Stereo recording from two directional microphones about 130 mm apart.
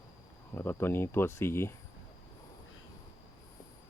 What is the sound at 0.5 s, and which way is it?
Speech, 15° left (ahead or behind).